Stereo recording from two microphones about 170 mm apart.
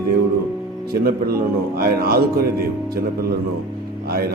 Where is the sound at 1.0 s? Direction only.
65° right (ahead or behind).